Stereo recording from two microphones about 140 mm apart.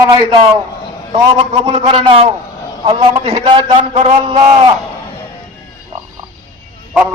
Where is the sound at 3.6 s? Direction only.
50° right (ahead or behind).